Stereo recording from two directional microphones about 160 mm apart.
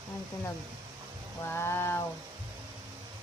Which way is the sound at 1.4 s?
15° left (ahead or behind).